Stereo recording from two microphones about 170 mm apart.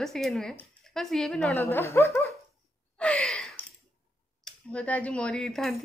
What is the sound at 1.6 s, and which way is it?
Speech, 15° left (ahead or behind).